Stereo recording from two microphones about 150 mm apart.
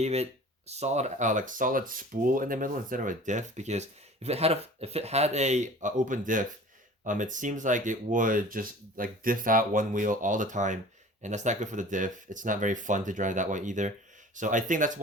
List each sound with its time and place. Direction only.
0.0 s speech: 45° right (ahead or behind)